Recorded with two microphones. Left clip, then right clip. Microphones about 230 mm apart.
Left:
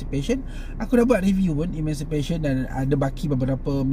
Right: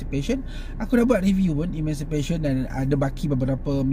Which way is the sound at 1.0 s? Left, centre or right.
Centre.